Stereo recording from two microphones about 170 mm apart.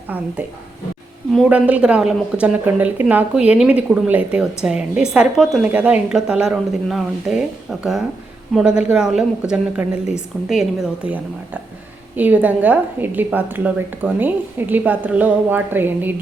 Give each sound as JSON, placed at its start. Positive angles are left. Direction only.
{"t": 1.3, "sound": "a woman's voice", "side_deg": -5}